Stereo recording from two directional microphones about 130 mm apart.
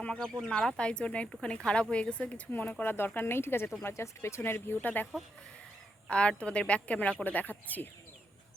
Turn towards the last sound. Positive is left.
turn(degrees=15)  # may be behind; listen again after turning